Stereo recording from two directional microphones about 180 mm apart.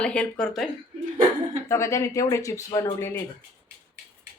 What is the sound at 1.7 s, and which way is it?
A woman's voice, 15° left (ahead or behind).